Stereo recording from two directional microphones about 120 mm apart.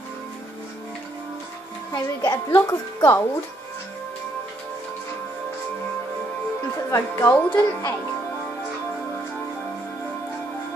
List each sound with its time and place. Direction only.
1.9 s speech: 20° left (ahead or behind)
6.9 s speech: 20° left (ahead or behind)